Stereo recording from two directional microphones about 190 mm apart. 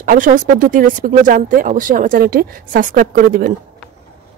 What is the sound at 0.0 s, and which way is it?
Speech, 45° right (ahead or behind).